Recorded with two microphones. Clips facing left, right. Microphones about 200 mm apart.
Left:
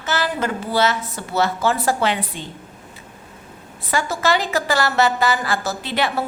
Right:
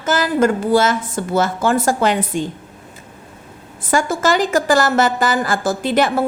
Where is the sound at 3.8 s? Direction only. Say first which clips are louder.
Right 4 dB; 45° right (ahead or behind).